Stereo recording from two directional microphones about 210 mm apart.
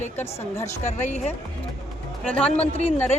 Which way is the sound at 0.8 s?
35° left (ahead or behind).